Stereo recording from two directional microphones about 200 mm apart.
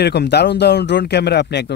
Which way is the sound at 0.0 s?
55° left (ahead or behind).